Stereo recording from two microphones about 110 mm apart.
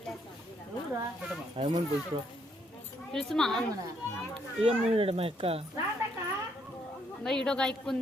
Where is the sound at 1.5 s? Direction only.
60° right (ahead or behind).